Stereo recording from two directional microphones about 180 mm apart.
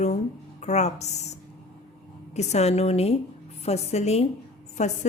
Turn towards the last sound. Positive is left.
turn(degrees=40)  # may be behind; listen again after turning